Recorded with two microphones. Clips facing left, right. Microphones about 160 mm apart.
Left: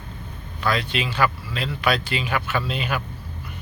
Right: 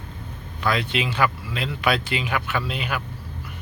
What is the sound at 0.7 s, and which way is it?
Speech, 20° right (ahead or behind).